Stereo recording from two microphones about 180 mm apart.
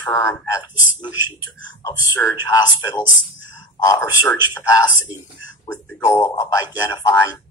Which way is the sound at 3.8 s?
10° left (ahead or behind).